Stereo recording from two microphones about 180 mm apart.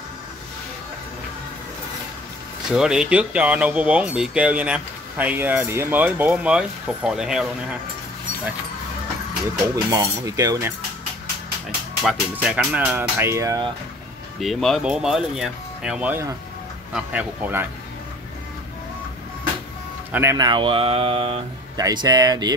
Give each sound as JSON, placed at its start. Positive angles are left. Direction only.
{"t": 2.7, "sound": "speech", "side_deg": -5}
{"t": 9.8, "sound": "cutlery", "side_deg": -20}
{"t": 12.0, "sound": "speech", "side_deg": -5}
{"t": 14.4, "sound": "speech", "side_deg": 0}
{"t": 20.1, "sound": "speech", "side_deg": -15}
{"t": 21.7, "sound": "cutlery", "side_deg": -20}